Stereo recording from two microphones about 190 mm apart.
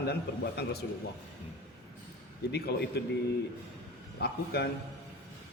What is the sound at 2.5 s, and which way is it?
Speech, 60° left (ahead or behind).